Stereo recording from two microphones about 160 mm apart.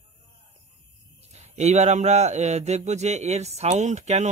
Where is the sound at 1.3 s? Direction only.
45° right (ahead or behind).